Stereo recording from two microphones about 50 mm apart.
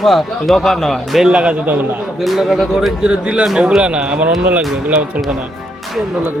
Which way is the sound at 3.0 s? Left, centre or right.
Centre.